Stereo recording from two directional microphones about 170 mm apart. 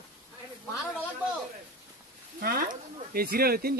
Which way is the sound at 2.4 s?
55° right (ahead or behind).